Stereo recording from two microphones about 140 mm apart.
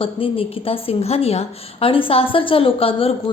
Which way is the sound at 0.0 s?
40° left (ahead or behind).